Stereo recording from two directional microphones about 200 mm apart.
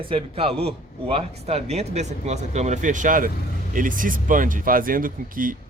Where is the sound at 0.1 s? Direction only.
30° right (ahead or behind).